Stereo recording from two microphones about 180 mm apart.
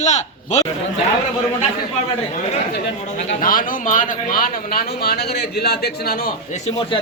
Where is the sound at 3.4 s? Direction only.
50° left (ahead or behind).